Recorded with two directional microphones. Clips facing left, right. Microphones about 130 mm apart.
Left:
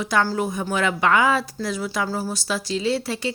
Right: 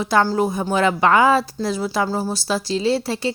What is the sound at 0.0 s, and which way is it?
A woman's voice, 30° right (ahead or behind).